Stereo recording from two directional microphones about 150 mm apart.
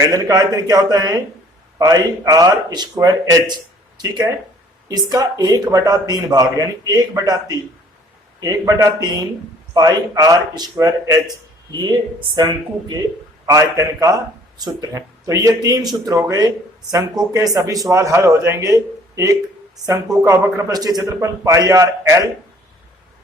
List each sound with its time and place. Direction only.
0.1 s a man's voice: 25° right (ahead or behind)